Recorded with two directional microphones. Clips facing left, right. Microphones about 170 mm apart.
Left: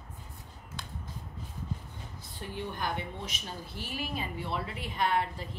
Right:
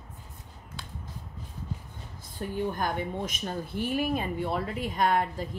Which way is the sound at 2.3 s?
45° right (ahead or behind).